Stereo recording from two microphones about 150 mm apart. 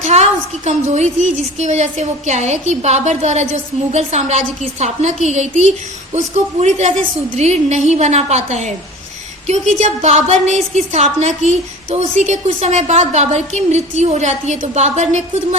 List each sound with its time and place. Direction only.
0.0 s a woman's voice: 50° right (ahead or behind)